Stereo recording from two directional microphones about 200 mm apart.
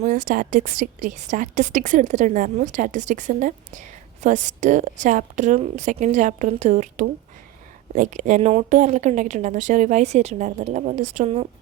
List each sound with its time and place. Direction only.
0.0 s a woman's voice: 40° right (ahead or behind)